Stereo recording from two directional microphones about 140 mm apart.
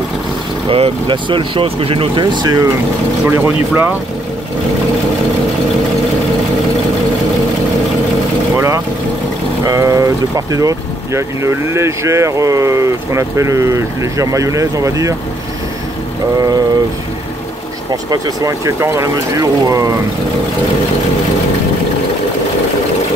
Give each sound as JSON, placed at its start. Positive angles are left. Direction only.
{"t": 0.7, "sound": "speech", "side_deg": -40}
{"t": 3.3, "sound": "speech", "side_deg": -15}
{"t": 8.5, "sound": "speech", "side_deg": -20}
{"t": 18.1, "sound": "speech", "side_deg": -25}